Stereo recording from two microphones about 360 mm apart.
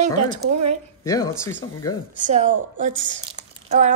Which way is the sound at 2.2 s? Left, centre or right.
Right.